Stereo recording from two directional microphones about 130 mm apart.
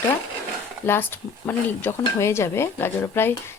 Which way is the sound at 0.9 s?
15° left (ahead or behind).